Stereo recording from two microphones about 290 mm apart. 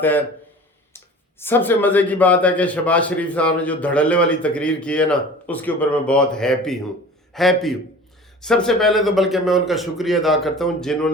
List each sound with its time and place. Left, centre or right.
0.0 s speech: centre